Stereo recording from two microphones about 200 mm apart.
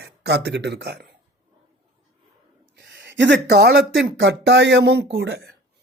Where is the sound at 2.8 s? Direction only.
60° right (ahead or behind).